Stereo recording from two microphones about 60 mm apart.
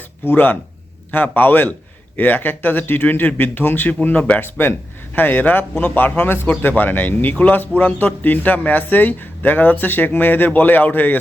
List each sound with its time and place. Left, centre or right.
0.3 s a man's voice: left
4.4 s a man's voice: left